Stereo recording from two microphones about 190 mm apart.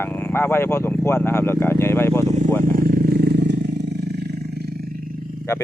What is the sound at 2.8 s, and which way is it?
Vehicle, 50° right (ahead or behind).